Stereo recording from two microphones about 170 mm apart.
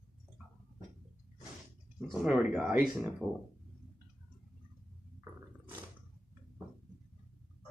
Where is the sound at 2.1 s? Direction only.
Centre (ahead or behind).